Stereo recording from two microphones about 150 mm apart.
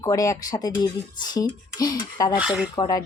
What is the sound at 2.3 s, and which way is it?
Speech, 5° right (ahead or behind).